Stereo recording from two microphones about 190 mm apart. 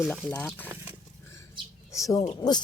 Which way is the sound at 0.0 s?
Centre (ahead or behind).